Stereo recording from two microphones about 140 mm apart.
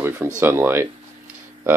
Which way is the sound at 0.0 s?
15° right (ahead or behind).